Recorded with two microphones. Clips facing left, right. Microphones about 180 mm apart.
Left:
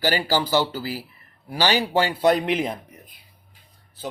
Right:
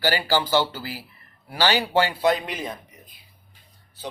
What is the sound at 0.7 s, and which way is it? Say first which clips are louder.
Speech: left 5 dB; 40° left (ahead or behind).